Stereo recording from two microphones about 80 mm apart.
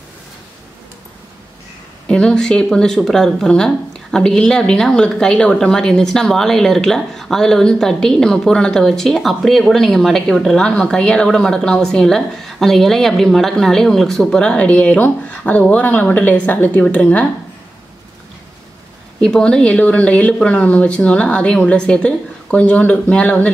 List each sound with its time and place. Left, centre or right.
2.0 s speech: centre
19.2 s speech: centre